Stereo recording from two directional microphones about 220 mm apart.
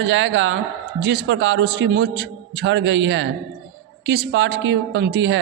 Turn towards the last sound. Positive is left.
turn(degrees=-55)  # may be behind; listen again after turning